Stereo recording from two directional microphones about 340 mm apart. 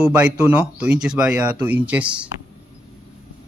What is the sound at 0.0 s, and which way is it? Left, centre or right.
Speech, centre.